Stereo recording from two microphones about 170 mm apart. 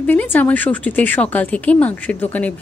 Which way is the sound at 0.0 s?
10° left (ahead or behind).